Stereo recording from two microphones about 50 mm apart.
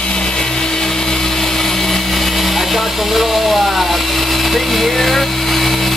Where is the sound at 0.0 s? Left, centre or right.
Centre.